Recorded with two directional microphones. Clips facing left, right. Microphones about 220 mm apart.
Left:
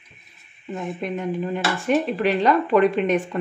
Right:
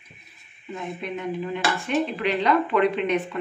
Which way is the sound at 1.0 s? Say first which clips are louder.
Left 3 dB; 45° left (ahead or behind).